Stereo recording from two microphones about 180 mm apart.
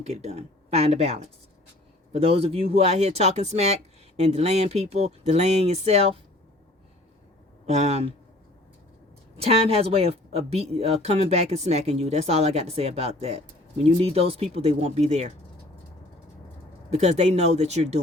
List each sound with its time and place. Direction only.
0.0 s speech: 35° right (ahead or behind)
7.7 s speech: 35° right (ahead or behind)
9.4 s speech: 35° right (ahead or behind)
16.9 s speech: 40° right (ahead or behind)